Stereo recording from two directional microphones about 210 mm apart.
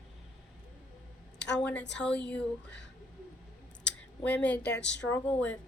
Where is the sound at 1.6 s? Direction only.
5° left (ahead or behind).